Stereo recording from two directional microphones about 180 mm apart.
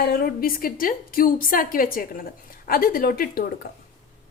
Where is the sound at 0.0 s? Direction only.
55° left (ahead or behind).